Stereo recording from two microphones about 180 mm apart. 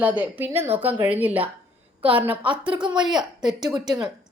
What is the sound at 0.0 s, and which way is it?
A woman's voice, 10° right (ahead or behind).